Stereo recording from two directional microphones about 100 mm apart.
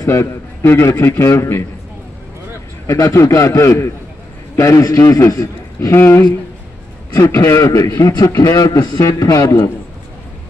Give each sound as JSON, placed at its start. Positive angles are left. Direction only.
{"t": 0.0, "sound": "a man's voice", "side_deg": 30}
{"t": 2.9, "sound": "a man's voice", "side_deg": 30}